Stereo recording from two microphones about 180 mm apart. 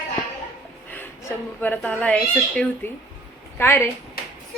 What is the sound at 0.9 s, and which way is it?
A child's voice, 10° left (ahead or behind).